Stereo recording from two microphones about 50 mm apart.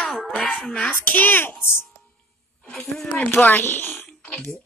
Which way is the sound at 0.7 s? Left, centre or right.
Left.